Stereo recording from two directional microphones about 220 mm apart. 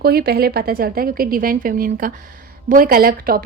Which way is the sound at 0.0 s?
45° right (ahead or behind).